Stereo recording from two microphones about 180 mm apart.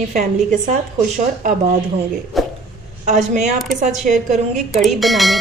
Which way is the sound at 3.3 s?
40° right (ahead or behind).